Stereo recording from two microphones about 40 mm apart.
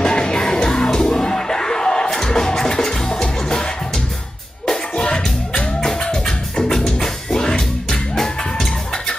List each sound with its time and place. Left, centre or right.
0.0 s music: centre
4.6 s music: centre